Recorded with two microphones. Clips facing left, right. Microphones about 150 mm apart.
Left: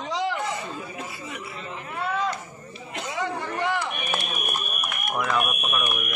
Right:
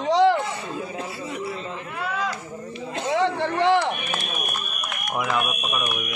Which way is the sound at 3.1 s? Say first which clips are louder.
Right 7 dB; 70° right (ahead or behind).